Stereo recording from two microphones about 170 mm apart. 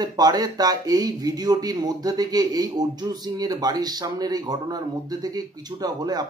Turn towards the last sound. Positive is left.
turn(degrees=-25)  # may be behind; listen again after turning